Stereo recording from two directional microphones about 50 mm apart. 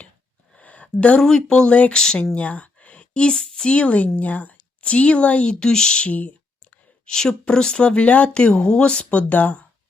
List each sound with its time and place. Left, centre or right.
0.6 s a sound: left
1.2 s speech: centre
2.3 s speech: left
6.1 s speech: left
7.0 s speech: centre; by 9.6 s left